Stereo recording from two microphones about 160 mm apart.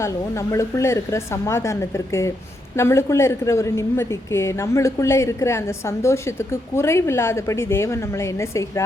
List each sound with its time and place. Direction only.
0.0 s a woman's voice: 20° left (ahead or behind)